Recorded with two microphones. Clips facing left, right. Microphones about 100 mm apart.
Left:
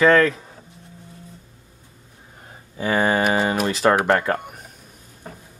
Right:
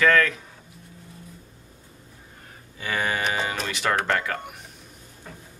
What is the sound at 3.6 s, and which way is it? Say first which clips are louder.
Speech: left 7 dB; 35° left (ahead or behind).